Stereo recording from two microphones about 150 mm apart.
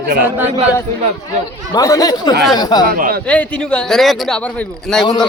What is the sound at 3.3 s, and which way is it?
A man's voice, 10° left (ahead or behind).